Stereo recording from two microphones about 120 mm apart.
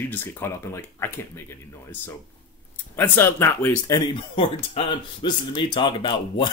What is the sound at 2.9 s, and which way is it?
Speech, 20° left (ahead or behind).